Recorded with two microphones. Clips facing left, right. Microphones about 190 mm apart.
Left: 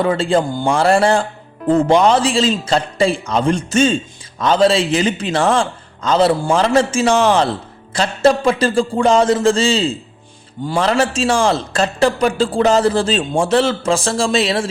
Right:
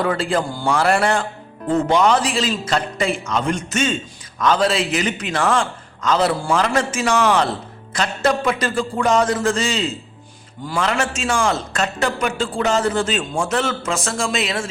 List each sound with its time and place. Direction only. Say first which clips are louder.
0.0 s a man's voice: left 4 dB; 25° left (ahead or behind)